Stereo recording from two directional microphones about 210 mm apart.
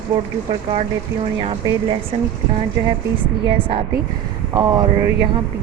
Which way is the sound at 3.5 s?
25° right (ahead or behind).